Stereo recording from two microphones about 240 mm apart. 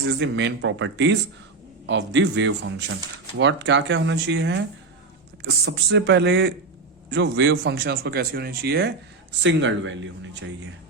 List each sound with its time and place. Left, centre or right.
0.1 s speech: right
5.6 s speech: right